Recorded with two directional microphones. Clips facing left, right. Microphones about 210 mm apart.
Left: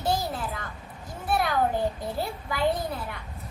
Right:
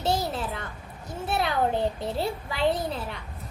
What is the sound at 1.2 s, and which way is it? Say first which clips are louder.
A child's voice: left 1 dB; 25° right (ahead or behind).